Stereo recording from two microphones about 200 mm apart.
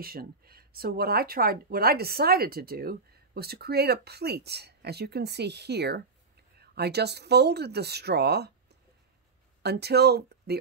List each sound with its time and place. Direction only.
0.0 s speech: 50° right (ahead or behind)
9.6 s speech: 55° right (ahead or behind)